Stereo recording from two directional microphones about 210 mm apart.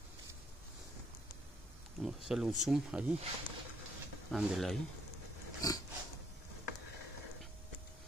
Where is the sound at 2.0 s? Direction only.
Centre (ahead or behind).